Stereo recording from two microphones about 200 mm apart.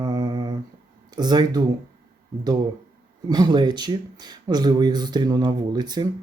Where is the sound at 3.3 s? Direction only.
20° right (ahead or behind).